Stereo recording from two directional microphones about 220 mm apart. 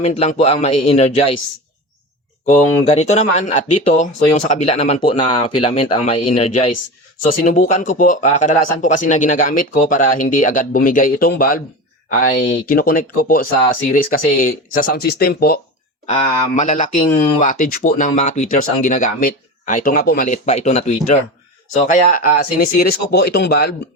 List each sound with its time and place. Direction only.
0.0 s speech: 30° left (ahead or behind)
2.5 s speech: 30° left (ahead or behind)
16.0 s speech: 30° left (ahead or behind)